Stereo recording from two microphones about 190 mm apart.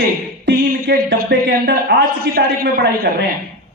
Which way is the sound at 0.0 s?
60° right (ahead or behind).